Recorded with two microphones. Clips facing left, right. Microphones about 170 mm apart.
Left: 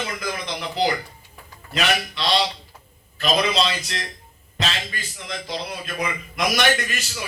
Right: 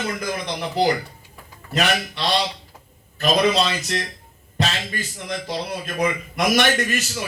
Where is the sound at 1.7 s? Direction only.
45° right (ahead or behind).